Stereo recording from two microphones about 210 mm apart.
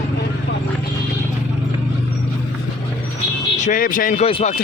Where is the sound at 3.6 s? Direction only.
40° left (ahead or behind).